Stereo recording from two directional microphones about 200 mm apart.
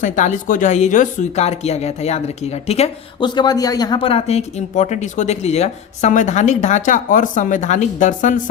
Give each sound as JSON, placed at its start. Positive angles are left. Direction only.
{"t": 0.0, "sound": "speech", "side_deg": 40}